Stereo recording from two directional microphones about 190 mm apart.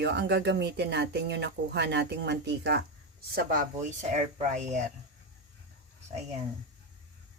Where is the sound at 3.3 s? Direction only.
50° right (ahead or behind).